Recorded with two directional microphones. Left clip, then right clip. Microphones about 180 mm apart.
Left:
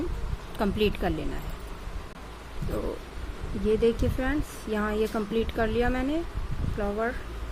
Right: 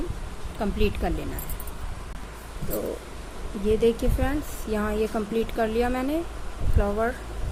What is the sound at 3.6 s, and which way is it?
Speech, 5° left (ahead or behind).